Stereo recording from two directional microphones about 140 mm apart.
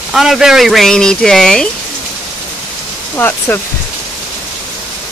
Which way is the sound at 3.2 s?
15° left (ahead or behind).